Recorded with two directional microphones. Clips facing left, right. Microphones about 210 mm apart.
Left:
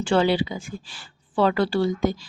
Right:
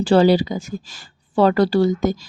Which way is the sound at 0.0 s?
35° right (ahead or behind).